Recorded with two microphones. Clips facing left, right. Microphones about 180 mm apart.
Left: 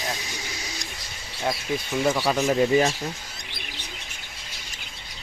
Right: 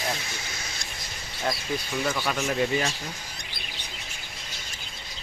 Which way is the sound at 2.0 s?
25° left (ahead or behind).